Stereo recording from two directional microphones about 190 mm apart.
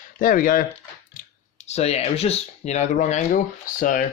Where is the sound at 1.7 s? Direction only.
35° left (ahead or behind).